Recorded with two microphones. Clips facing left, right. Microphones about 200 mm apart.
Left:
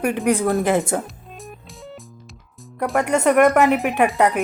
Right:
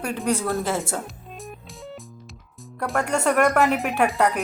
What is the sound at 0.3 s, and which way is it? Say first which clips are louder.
Speech: left 5 dB; 15° left (ahead or behind).